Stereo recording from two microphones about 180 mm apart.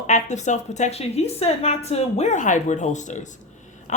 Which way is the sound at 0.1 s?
40° left (ahead or behind).